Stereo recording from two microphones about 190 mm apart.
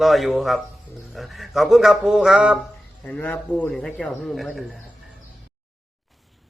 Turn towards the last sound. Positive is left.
turn(degrees=0)  # may be behind; listen again after turning